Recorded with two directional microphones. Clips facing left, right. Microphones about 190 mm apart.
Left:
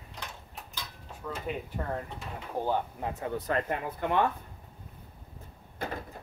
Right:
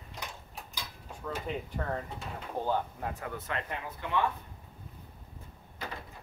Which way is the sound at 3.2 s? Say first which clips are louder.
Left 6 dB; 30° left (ahead or behind).